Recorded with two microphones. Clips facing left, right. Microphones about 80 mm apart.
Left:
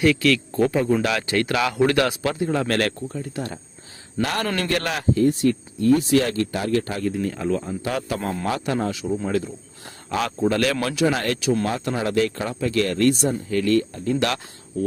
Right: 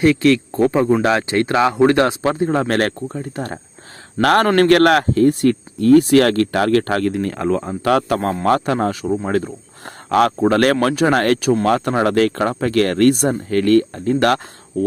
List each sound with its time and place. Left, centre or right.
0.0 s speech: right
4.2 s speech: right